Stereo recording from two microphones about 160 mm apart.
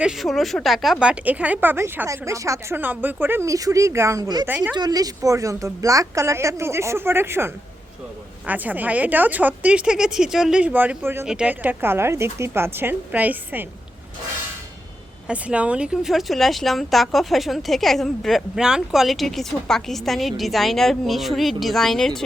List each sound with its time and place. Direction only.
0.0 s speech: centre (ahead or behind); by 4.4 s 25° right (ahead or behind)
4.4 s speech: 10° right (ahead or behind)
4.7 s a woman's voice: 25° right (ahead or behind)
15.3 s speech: 5° right (ahead or behind)